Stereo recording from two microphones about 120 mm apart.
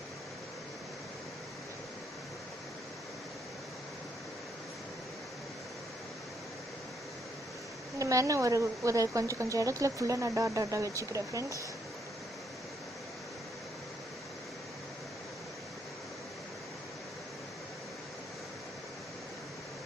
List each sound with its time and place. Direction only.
7.9 s a woman's voice: 25° right (ahead or behind)